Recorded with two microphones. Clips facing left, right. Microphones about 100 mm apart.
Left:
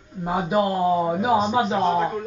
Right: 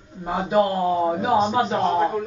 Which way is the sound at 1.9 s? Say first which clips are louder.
Right 2 dB; 10° right (ahead or behind).